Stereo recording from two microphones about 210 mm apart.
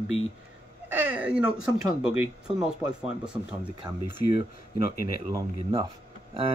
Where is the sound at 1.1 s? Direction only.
5° right (ahead or behind).